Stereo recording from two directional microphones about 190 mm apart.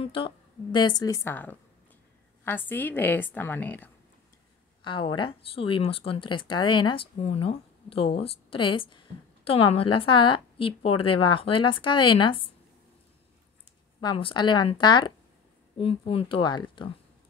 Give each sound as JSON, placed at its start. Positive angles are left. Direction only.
{"t": 0.0, "sound": "a woman's voice", "side_deg": 30}
{"t": 4.8, "sound": "a woman's voice", "side_deg": 25}
{"t": 14.0, "sound": "a woman's voice", "side_deg": 25}